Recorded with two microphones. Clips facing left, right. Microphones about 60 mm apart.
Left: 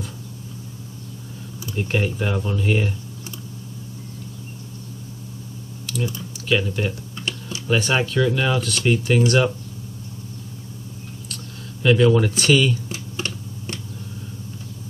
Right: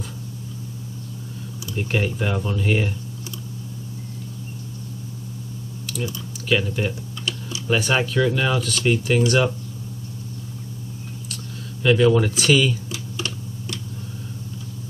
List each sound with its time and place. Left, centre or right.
1.8 s speech: centre
6.3 s speech: centre
11.2 s speech: centre
12.8 s computer keyboard: left